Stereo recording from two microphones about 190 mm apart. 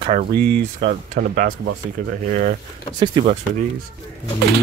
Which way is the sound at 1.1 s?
50° right (ahead or behind).